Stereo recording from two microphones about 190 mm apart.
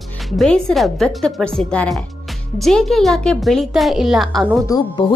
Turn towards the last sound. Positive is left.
turn(degrees=20)  # may be behind; listen again after turning